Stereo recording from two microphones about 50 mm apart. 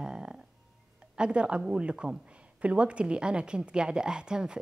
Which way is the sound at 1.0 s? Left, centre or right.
Centre.